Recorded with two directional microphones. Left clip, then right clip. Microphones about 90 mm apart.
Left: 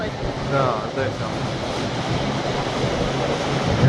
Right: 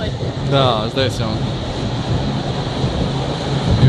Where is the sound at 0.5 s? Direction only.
15° right (ahead or behind).